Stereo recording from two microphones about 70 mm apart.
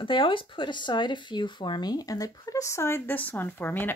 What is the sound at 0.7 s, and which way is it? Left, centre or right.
Speech, left.